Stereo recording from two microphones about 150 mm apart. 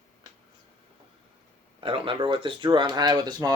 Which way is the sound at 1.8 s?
35° right (ahead or behind).